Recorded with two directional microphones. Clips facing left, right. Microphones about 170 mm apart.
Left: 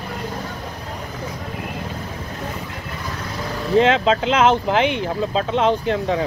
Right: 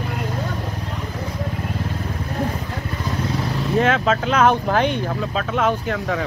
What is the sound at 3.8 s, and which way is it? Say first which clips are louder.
Speech: left 3 dB; 25° left (ahead or behind).